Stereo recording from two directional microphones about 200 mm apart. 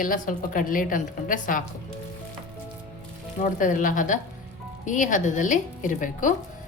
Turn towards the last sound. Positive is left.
turn(degrees=40)  # may be behind; listen again after turning